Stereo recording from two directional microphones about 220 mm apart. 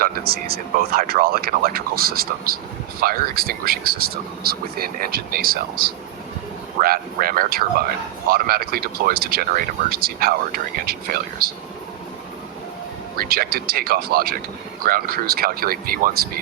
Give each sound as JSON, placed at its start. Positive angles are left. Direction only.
{"t": 0.0, "sound": "speech", "side_deg": -45}
{"t": 13.1, "sound": "speech", "side_deg": -40}